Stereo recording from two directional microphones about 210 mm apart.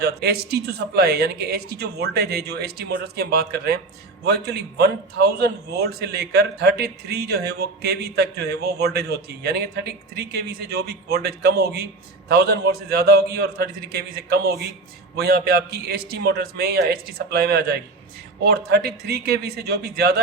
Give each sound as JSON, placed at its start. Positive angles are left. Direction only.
{"t": 0.0, "sound": "a man's voice", "side_deg": -50}